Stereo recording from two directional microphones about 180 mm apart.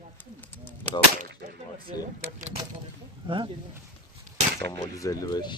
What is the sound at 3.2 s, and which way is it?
Speech, 25° right (ahead or behind).